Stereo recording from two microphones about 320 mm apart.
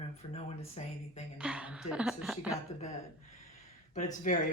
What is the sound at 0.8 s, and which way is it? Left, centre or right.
Speech, centre.